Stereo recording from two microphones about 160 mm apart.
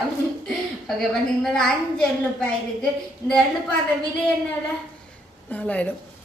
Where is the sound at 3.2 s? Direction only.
25° left (ahead or behind).